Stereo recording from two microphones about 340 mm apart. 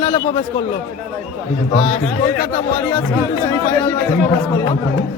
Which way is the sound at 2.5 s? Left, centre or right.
Centre.